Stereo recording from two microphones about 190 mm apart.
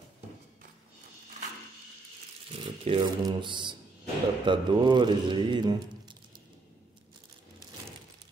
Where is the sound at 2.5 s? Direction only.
25° right (ahead or behind).